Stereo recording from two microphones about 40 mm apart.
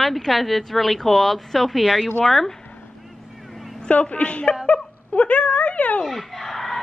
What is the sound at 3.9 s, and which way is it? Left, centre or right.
A woman's voice, left.